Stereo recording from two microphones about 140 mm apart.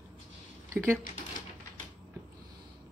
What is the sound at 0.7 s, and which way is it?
Speech, 15° right (ahead or behind).